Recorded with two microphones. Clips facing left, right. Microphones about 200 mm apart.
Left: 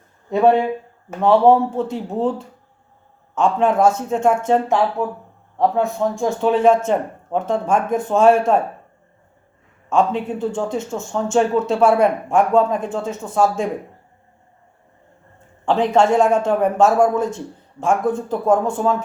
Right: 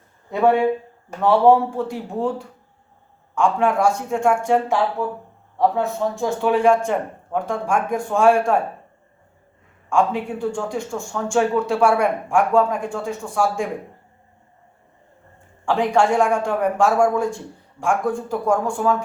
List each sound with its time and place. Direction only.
1.2 s a man's voice: 20° left (ahead or behind)
3.3 s a man's voice: 20° left (ahead or behind)
9.9 s a man's voice: 20° left (ahead or behind)
16.0 s a man's voice: 20° left (ahead or behind)